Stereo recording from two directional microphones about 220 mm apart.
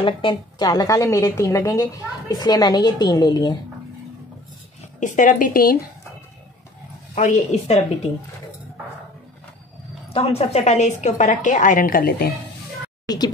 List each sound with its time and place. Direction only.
0.0 s a woman's voice: 20° left (ahead or behind)
5.0 s a woman's voice: 35° left (ahead or behind)
7.2 s a woman's voice: 35° left (ahead or behind)
10.1 s a woman's voice: 25° left (ahead or behind)
13.0 s speech: 20° left (ahead or behind)